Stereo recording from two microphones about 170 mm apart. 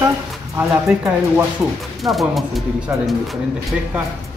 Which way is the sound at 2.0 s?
Centre (ahead or behind).